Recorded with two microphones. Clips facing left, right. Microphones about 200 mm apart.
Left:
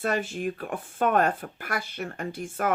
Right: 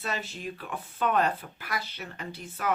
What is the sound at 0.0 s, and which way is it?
Speech, 50° left (ahead or behind).